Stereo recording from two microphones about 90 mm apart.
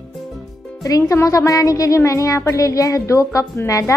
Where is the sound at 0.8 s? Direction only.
40° left (ahead or behind).